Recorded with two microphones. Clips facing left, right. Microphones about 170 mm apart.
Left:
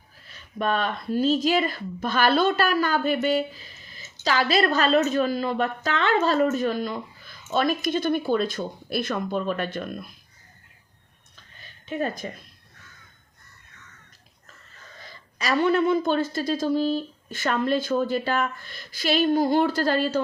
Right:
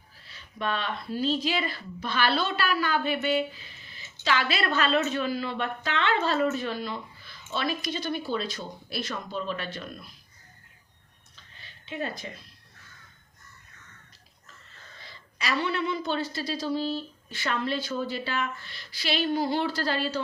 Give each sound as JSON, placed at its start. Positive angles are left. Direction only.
{"t": 0.3, "sound": "speech", "side_deg": 45}
{"t": 11.9, "sound": "speech", "side_deg": 45}
{"t": 15.0, "sound": "speech", "side_deg": 45}